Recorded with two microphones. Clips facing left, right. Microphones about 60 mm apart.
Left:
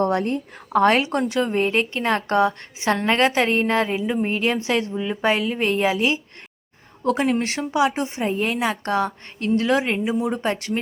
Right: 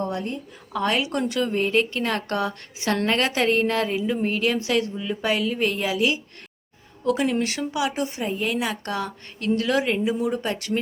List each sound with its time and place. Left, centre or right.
0.0 s a woman's voice: left
0.7 s a woman's voice: left
1.3 s a woman's voice: left